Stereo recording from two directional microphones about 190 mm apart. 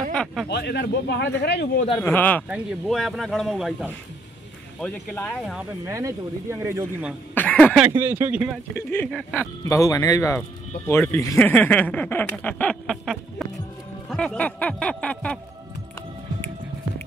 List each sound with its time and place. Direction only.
0.1 s speech: 5° left (ahead or behind)
0.5 s speech: 60° left (ahead or behind)
2.0 s speech: 10° left (ahead or behind)
5.9 s speech: 15° right (ahead or behind)
7.3 s a sound: 10° left (ahead or behind)
7.8 s speech: 10° right (ahead or behind)
8.7 s speech: 10° left (ahead or behind)